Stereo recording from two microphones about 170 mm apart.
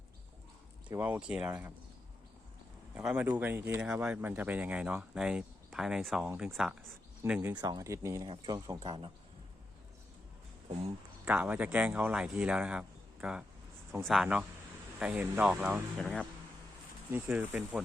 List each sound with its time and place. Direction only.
0.9 s speech: 10° right (ahead or behind)
2.9 s speech: 5° right (ahead or behind); by 9.1 s 30° right (ahead or behind)
11.3 s speech: 10° right (ahead or behind)
17.1 s speech: 10° right (ahead or behind)